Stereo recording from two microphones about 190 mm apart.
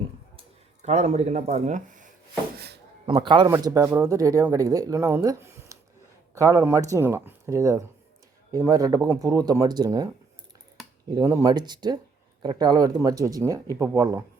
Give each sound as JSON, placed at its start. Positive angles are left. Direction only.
{"t": 0.3, "sound": "speech", "side_deg": -35}
{"t": 2.6, "sound": "a sound", "side_deg": -60}
{"t": 3.1, "sound": "speech", "side_deg": -25}
{"t": 11.1, "sound": "speech", "side_deg": -15}